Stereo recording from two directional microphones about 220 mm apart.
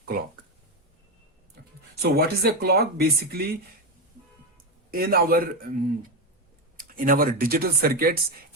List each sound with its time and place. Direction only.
2.0 s speech: 45° right (ahead or behind)
4.9 s speech: 40° right (ahead or behind)
6.7 s speech: 40° right (ahead or behind)